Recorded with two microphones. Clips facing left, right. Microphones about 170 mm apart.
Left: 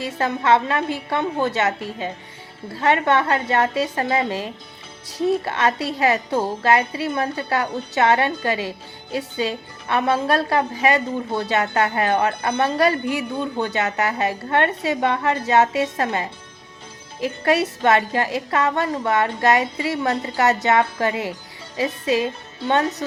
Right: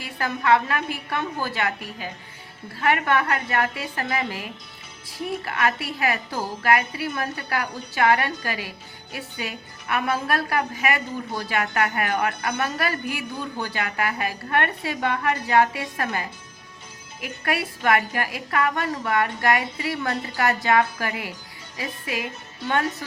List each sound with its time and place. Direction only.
0.0 s a woman's voice: 25° left (ahead or behind)